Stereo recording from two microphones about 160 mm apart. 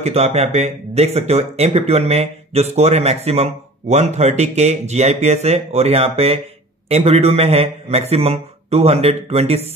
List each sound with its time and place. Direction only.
0.0 s a man's voice: 40° right (ahead or behind)